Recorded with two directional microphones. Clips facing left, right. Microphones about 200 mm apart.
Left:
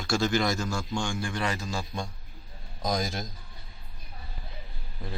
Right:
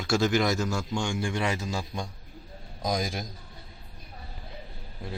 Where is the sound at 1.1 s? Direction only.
20° right (ahead or behind).